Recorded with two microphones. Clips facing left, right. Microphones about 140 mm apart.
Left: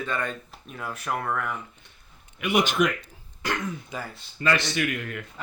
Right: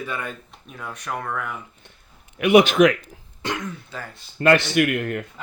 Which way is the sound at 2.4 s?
75° right (ahead or behind).